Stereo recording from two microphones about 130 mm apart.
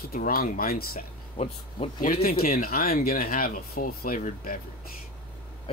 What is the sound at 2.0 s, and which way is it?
Speech, 90° left.